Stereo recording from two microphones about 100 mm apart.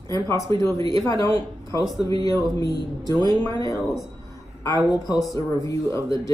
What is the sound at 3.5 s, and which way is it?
Speech, 40° left (ahead or behind).